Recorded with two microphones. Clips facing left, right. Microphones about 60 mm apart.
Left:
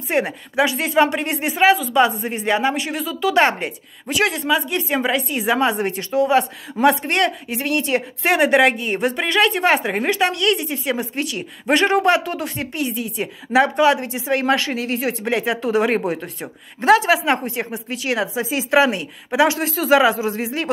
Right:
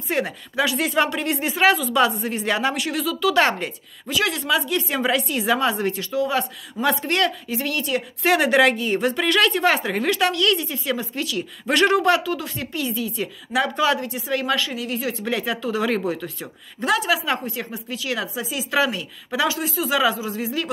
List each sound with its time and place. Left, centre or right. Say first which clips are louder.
0.1 s a woman's voice: left 4 dB; left
1.6 s speech: left 3 dB; centre
2.0 s a woman's voice: left 3 dB; left
5.0 s a woman's voice: left 1 dB; centre; by 20.2 s left